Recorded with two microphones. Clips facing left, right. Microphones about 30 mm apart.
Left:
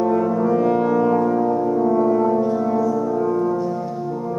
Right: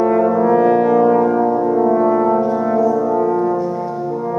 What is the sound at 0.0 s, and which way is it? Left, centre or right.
Brass instrument, right.